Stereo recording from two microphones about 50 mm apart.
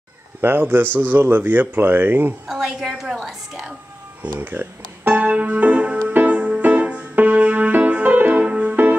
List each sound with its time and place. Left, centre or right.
0.4 s speech: right
2.4 s a woman's voice: centre
4.4 s music: right
8.5 s music: right